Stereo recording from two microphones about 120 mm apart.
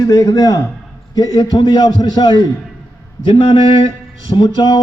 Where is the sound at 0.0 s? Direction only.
30° left (ahead or behind).